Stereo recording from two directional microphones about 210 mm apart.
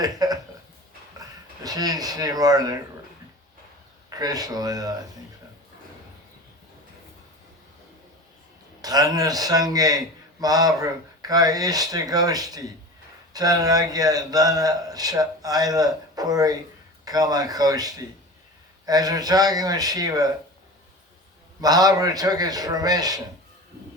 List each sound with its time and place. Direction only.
0.0 s a sound: 20° right (ahead or behind)
1.6 s a man's voice: 15° right (ahead or behind)
4.2 s a man's voice: 20° right (ahead or behind)
8.8 s a man's voice: 20° right (ahead or behind)
21.6 s a man's voice: 20° right (ahead or behind)